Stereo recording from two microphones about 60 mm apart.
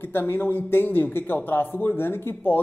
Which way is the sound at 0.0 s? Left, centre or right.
Left.